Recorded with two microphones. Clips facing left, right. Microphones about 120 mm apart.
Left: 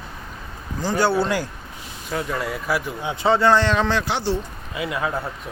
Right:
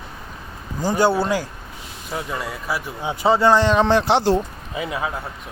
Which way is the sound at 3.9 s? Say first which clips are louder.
Right 7 dB; 70° right (ahead or behind).